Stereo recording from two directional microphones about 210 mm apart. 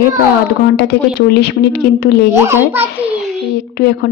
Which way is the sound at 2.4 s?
10° right (ahead or behind).